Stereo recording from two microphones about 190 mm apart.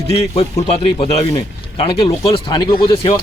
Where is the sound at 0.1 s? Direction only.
35° left (ahead or behind).